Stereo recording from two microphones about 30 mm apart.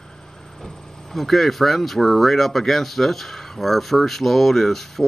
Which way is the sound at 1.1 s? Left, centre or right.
Centre.